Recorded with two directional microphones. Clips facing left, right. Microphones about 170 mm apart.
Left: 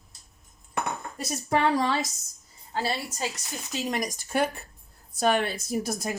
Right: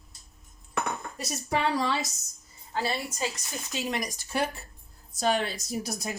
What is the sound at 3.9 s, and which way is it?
Speech, 50° left (ahead or behind).